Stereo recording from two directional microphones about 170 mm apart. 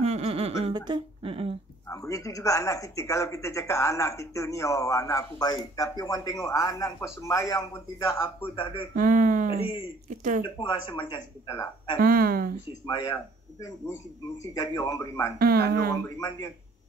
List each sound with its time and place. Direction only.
0.0 s a sound: 40° right (ahead or behind)
0.7 s speech: 25° right (ahead or behind)
1.9 s speech: 20° left (ahead or behind)
8.9 s speech: 50° right (ahead or behind)
10.6 s speech: 30° left (ahead or behind)
12.0 s speech: 60° right (ahead or behind)
12.8 s speech: 25° left (ahead or behind)
15.3 s speech: 60° right (ahead or behind)
15.9 s speech: 20° left (ahead or behind)